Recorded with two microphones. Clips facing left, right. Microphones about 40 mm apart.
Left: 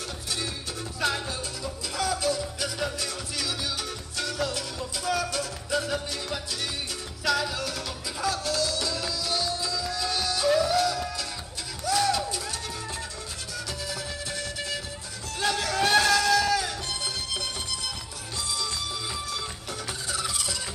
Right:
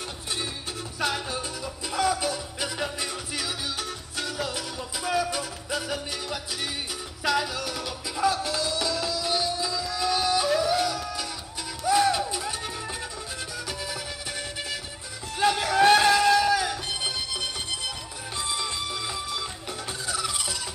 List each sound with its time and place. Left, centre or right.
0.9 s music: right
15.3 s music: right
18.4 s music: right